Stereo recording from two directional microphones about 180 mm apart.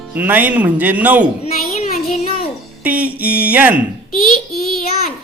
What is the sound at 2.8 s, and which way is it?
Speech, 10° right (ahead or behind).